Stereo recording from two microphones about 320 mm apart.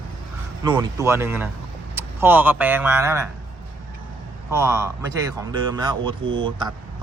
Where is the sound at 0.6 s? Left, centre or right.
Centre.